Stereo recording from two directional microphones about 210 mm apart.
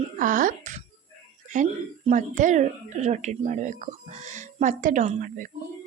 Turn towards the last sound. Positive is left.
turn(degrees=-35)  # may be behind; listen again after turning